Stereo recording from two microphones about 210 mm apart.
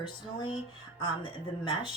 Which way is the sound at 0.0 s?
20° left (ahead or behind).